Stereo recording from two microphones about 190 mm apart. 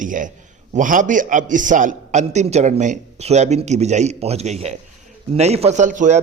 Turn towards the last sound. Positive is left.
turn(degrees=-40)  # may be behind; listen again after turning